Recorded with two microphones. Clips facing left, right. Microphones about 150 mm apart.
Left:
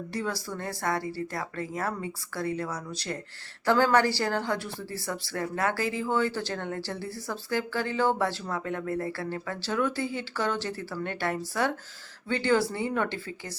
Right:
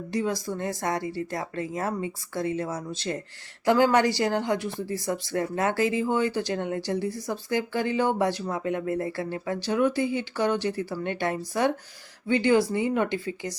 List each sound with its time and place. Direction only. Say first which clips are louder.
0.1 s speech: right 6 dB; 20° right (ahead or behind)